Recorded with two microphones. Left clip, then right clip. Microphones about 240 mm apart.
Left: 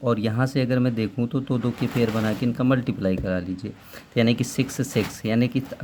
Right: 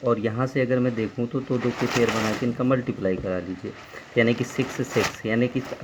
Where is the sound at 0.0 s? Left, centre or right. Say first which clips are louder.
Even; left.